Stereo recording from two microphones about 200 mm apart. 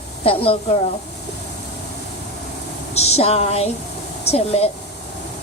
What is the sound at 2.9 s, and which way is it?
A woman's voice, 30° left (ahead or behind).